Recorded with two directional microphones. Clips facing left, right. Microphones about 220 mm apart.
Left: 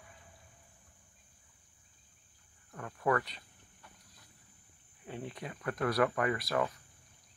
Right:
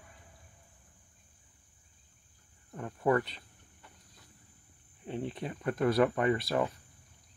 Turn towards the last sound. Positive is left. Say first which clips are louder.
# right 3 dB
turn(degrees=-25)  # may be behind; listen again after turning